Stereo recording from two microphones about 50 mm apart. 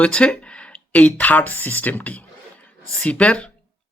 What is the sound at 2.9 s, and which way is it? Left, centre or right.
Speech, left.